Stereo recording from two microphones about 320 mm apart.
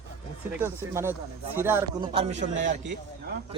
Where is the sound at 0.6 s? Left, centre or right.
Centre.